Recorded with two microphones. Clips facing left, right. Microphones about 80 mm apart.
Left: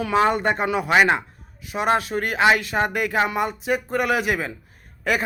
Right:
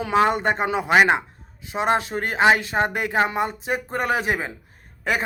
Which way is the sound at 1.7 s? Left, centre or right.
Right.